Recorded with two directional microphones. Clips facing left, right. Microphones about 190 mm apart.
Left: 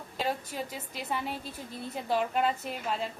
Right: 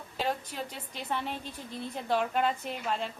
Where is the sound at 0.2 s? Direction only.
10° left (ahead or behind).